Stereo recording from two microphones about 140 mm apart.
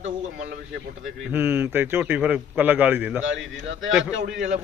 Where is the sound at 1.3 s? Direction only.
15° right (ahead or behind).